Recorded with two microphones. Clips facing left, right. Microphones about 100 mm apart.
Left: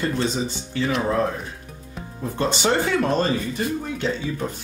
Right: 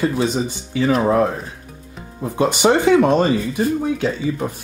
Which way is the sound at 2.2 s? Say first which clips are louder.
Right 6 dB; 10° right (ahead or behind).